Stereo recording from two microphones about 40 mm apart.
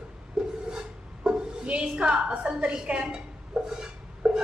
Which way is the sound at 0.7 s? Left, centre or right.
Centre.